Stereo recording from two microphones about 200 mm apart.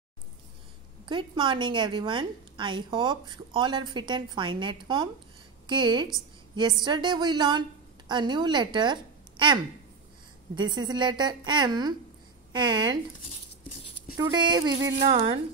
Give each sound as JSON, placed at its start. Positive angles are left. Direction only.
{"t": 1.0, "sound": "a woman's voice", "side_deg": -25}
{"t": 14.1, "sound": "a woman's voice", "side_deg": -20}
{"t": 15.0, "sound": "a woman's voice", "side_deg": -30}